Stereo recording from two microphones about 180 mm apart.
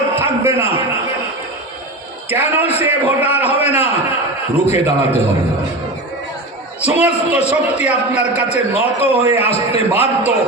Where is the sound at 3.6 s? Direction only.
35° left (ahead or behind).